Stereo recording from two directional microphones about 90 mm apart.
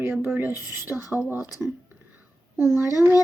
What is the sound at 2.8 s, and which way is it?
Speech, 25° right (ahead or behind).